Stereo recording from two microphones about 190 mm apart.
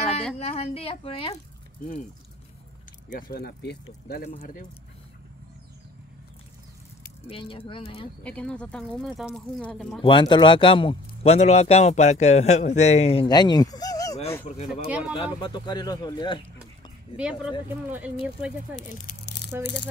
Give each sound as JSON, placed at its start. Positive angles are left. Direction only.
{"t": 0.4, "sound": "a man's voice", "side_deg": 35}
{"t": 3.1, "sound": "speech", "side_deg": 50}
{"t": 7.2, "sound": "speech", "side_deg": 30}
{"t": 8.2, "sound": "speech", "side_deg": 5}
{"t": 10.0, "sound": "a man's voice", "side_deg": 25}
{"t": 14.9, "sound": "speech", "side_deg": -5}
{"t": 15.1, "sound": "speech", "side_deg": 25}
{"t": 17.2, "sound": "speech", "side_deg": -5}